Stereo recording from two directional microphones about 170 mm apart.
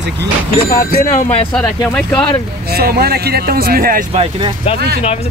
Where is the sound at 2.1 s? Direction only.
30° left (ahead or behind).